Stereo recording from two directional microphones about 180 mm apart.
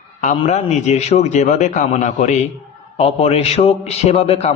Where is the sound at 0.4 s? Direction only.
40° left (ahead or behind).